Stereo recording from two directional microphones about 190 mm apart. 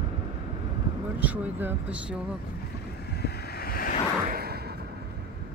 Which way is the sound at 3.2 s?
50° left (ahead or behind).